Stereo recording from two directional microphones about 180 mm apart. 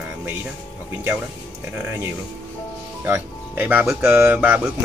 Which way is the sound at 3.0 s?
10° right (ahead or behind).